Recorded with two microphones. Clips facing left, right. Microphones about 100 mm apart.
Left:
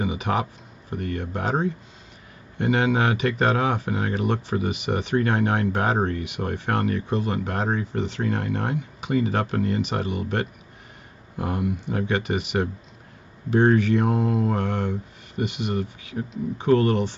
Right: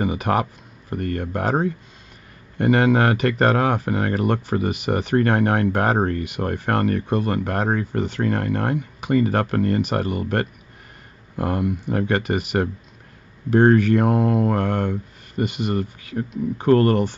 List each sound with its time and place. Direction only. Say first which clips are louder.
0.0 s speech: right 4 dB; 55° right (ahead or behind)